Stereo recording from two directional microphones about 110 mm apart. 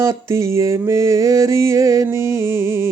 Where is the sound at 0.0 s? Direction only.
25° right (ahead or behind).